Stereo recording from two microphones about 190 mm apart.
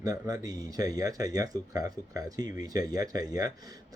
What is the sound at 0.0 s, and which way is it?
Speech, 20° right (ahead or behind).